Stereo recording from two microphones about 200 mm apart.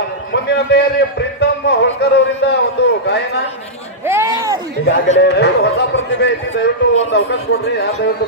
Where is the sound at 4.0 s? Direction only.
10° right (ahead or behind).